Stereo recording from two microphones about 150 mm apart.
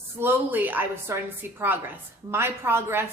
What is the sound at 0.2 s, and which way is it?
A woman's voice, 15° right (ahead or behind).